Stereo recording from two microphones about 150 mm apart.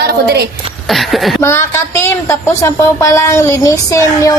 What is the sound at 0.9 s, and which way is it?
Speech, centre (ahead or behind).